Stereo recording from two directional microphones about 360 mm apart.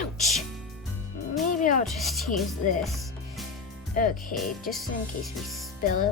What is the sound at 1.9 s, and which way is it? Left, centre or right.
Speech, centre.